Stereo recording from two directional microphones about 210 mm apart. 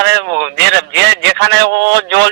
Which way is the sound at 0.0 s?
55° right (ahead or behind).